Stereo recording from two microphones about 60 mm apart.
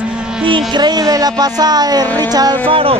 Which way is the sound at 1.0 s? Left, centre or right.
Right.